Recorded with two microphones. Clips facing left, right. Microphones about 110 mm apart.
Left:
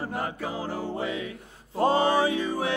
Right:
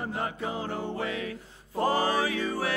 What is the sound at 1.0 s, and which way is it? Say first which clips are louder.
Music: left 1 dB; 25° left (ahead or behind).